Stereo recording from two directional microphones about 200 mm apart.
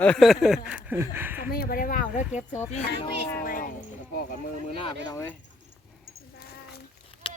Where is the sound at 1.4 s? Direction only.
50° left (ahead or behind).